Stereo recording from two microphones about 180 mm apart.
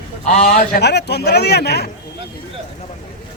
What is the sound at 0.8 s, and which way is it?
A man's voice, 65° left (ahead or behind).